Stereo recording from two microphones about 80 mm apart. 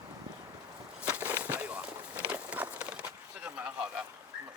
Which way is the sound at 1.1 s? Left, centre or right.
Centre.